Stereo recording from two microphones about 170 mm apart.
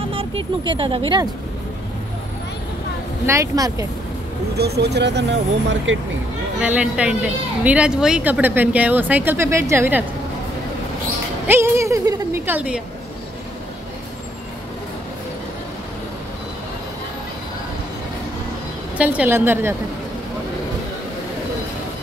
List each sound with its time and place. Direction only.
0.1 s speech: 35° right (ahead or behind)
3.3 s speech: 20° right (ahead or behind)
4.6 s speech: 70° right (ahead or behind); by 6.0 s 90° right
6.6 s speech: 5° right (ahead or behind)
11.4 s a woman's voice: 15° right (ahead or behind)
18.9 s speech: 10° right (ahead or behind)